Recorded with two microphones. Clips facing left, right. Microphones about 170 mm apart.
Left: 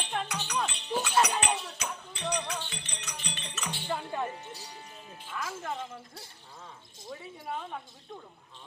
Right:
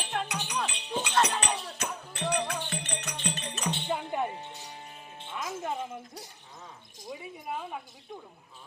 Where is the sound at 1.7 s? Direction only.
50° right (ahead or behind).